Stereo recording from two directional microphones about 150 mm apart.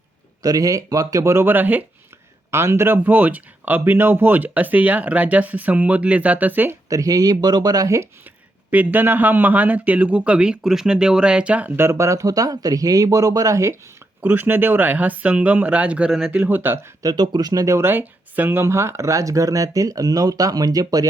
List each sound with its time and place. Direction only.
0.4 s speech: 25° right (ahead or behind)
6.9 s speech: 25° right (ahead or behind)
8.7 s speech: 10° right (ahead or behind)